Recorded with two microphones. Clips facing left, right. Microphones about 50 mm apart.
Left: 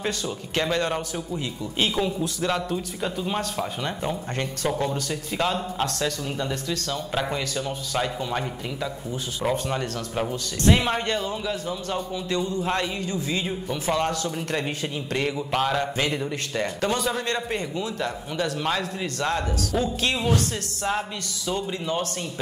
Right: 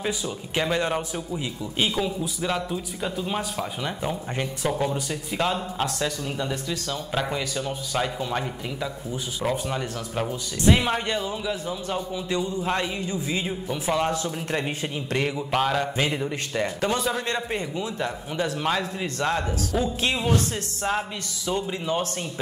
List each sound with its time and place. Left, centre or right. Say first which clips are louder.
0.0 s a man's voice: even; centre
1.9 s a man's voice: left 1 dB; centre
13.5 s a man's voice: even; centre
15.1 s a man's voice: right 1 dB; centre
19.8 s a man's voice: even; right